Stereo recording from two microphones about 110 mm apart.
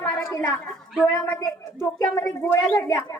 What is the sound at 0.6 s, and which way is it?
A woman's voice, 5° left (ahead or behind).